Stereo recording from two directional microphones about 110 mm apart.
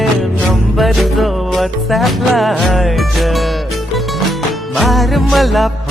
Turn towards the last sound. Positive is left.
turn(degrees=0)  # may be behind; listen again after turning